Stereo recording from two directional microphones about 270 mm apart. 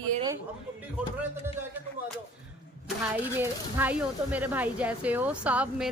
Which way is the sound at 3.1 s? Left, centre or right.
Centre.